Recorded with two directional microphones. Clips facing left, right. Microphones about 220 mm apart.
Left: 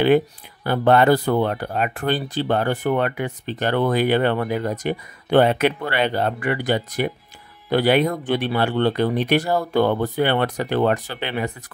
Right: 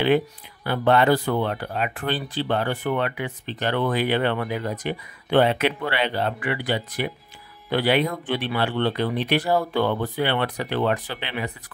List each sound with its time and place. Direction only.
0.7 s speech: 45° left (ahead or behind)